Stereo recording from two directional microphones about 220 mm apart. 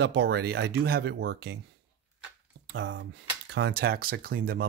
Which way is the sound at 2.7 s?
55° right (ahead or behind).